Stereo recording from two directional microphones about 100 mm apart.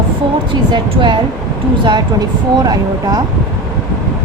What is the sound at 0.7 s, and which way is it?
Speech, 50° right (ahead or behind).